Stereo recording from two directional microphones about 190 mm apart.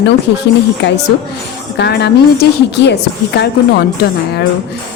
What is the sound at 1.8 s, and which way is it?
A woman's voice, 60° left (ahead or behind).